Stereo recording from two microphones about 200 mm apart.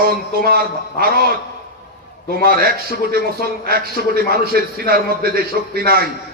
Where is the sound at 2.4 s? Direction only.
50° right (ahead or behind).